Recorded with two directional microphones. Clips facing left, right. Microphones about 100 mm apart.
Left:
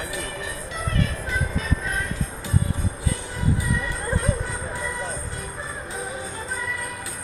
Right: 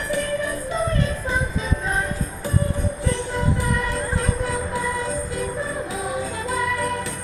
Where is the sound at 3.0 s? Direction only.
70° right (ahead or behind); by 4.5 s 90° right.